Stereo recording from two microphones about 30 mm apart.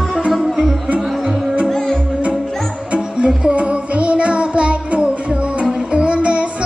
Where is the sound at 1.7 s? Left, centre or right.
Centre.